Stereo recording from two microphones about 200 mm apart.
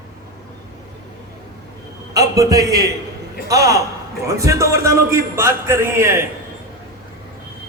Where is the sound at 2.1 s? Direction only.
15° right (ahead or behind).